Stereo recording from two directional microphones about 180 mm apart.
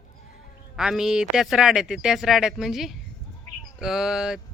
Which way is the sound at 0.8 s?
5° right (ahead or behind).